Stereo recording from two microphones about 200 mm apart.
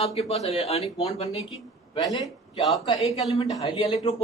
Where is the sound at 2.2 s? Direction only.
Centre (ahead or behind).